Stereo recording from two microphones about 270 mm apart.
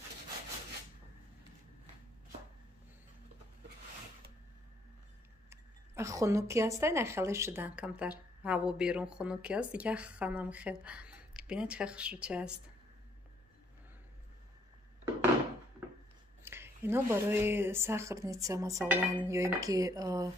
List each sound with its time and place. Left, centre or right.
5.5 s a woman's voice: centre
16.4 s speech: centre